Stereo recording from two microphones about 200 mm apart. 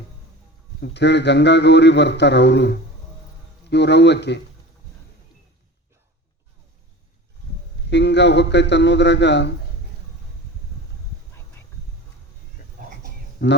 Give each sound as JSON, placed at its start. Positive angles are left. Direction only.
{"t": 0.8, "sound": "a man's voice", "side_deg": 60}
{"t": 7.9, "sound": "a man's voice", "side_deg": 60}
{"t": 12.6, "sound": "a sound", "side_deg": 55}
{"t": 13.4, "sound": "a man's voice", "side_deg": 60}